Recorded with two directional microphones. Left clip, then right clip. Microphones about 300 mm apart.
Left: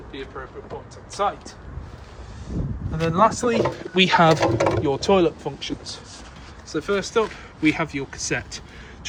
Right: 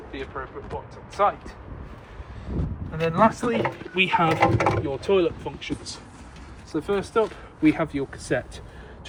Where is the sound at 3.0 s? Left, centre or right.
Centre.